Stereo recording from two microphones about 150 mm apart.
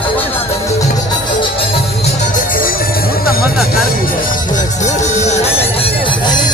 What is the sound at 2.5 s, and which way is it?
Music, 75° left (ahead or behind).